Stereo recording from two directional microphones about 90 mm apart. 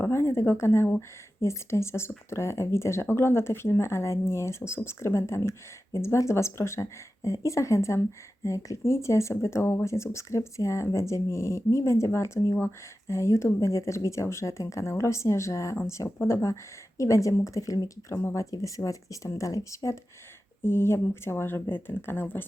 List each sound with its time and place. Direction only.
0.0 s speech: 30° left (ahead or behind)
18.2 s speech: 30° left (ahead or behind)